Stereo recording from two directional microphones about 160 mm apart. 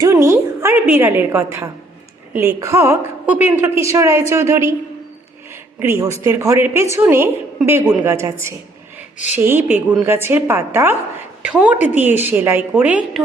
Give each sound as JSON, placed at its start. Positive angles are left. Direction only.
{"t": 0.0, "sound": "a woman's voice", "side_deg": -20}
{"t": 5.8, "sound": "a woman's voice", "side_deg": -15}